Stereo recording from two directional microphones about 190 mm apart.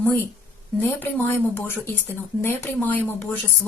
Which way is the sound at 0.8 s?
10° left (ahead or behind).